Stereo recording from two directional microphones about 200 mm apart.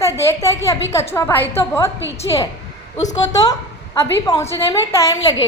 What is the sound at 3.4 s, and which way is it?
A woman's voice, 15° left (ahead or behind).